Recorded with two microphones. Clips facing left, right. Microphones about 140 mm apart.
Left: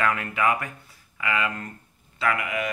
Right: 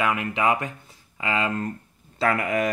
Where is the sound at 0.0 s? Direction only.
20° right (ahead or behind).